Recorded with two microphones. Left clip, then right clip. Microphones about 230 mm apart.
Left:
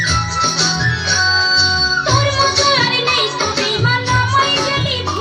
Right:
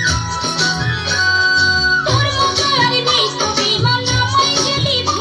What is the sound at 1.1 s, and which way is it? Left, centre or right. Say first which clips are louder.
Music: right 1 dB; right.